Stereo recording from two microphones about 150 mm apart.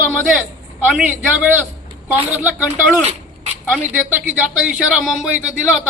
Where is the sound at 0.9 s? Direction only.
10° right (ahead or behind).